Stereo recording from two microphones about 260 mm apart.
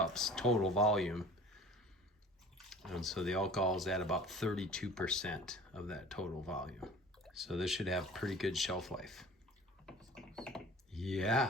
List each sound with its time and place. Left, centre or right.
0.0 s speech: centre
9.8 s typing: centre